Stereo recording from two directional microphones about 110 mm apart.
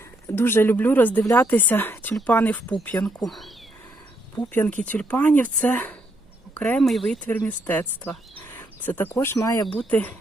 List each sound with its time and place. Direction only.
0.3 s speech: 20° left (ahead or behind)
3.2 s speech: centre (ahead or behind)
4.5 s speech: 15° left (ahead or behind)
7.3 s speech: 15° left (ahead or behind)
9.7 s speech: 15° left (ahead or behind)